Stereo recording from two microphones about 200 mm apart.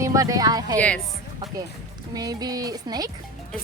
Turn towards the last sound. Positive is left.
turn(degrees=-20)  # may be behind; listen again after turning